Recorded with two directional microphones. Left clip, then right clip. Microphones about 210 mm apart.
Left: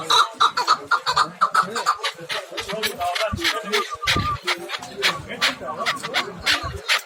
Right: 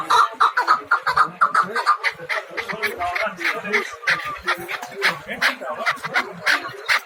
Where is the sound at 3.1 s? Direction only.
35° left (ahead or behind).